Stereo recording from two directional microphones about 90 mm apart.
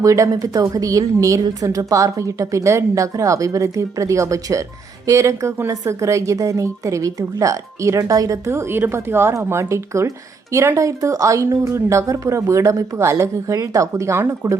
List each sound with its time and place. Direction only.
0.0 s speech: 35° right (ahead or behind)